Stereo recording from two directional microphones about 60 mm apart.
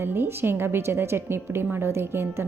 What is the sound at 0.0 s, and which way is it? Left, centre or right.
Speech, right.